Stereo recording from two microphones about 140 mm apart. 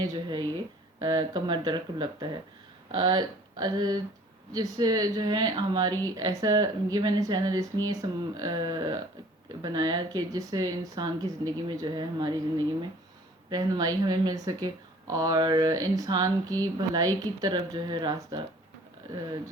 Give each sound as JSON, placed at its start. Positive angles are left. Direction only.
{"t": 0.0, "sound": "speech", "side_deg": -30}